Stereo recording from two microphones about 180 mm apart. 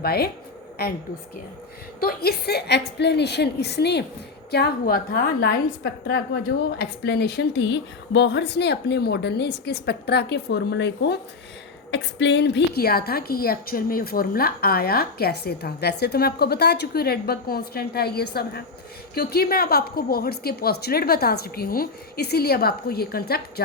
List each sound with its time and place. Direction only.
0.0 s a woman's voice: 60° left (ahead or behind)
2.0 s a woman's voice: 60° left (ahead or behind)